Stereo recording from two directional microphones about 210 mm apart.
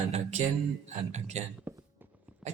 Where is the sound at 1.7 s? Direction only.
10° right (ahead or behind).